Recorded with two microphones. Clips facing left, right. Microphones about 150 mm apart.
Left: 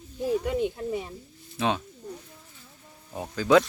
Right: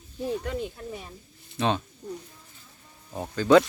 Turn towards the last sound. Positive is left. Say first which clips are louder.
# right 2 dB
turn(degrees=5)  # may be behind; listen again after turning